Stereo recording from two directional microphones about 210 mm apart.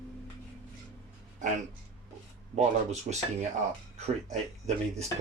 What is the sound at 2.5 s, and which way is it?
Speech, 35° right (ahead or behind).